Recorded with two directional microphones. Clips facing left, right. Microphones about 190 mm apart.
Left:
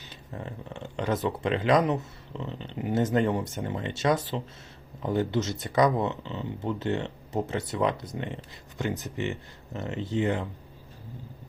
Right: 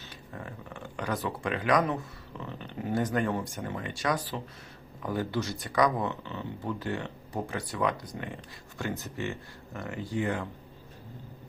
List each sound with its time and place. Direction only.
0.3 s speech: 25° left (ahead or behind)